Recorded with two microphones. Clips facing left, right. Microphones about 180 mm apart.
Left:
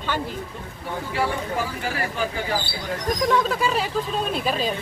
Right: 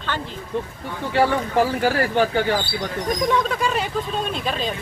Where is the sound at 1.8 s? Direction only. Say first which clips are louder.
Right 8 dB; 75° right (ahead or behind).